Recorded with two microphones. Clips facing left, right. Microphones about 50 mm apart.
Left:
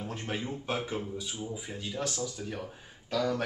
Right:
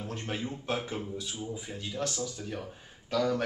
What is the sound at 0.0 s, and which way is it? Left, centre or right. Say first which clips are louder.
Speech: even; centre.